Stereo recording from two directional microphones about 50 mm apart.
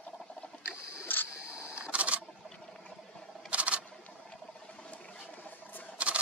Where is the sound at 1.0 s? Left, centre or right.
Left.